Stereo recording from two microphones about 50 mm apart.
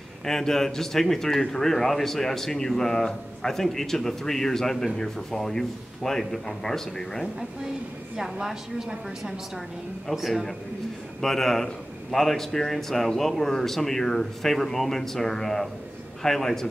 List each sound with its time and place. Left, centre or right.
0.2 s speech: centre
8.2 s a woman's voice: centre